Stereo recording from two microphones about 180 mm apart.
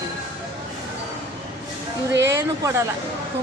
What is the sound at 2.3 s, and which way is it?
Speech, 15° right (ahead or behind).